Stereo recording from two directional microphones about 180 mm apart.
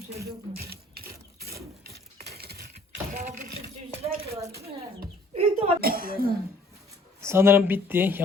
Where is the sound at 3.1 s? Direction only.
40° right (ahead or behind).